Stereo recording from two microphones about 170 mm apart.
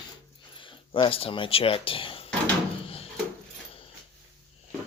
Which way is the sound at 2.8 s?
35° left (ahead or behind).